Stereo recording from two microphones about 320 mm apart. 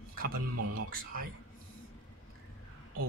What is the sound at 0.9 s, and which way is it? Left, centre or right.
Speech, right.